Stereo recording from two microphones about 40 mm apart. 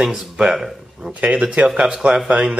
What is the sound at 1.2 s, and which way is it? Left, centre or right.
Speech, right.